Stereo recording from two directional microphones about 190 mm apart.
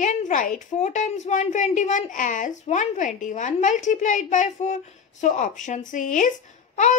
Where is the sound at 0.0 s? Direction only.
40° left (ahead or behind).